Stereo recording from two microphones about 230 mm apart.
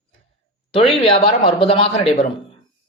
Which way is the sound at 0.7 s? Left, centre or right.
Left.